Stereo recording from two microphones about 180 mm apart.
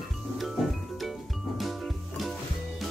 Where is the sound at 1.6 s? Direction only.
Centre (ahead or behind).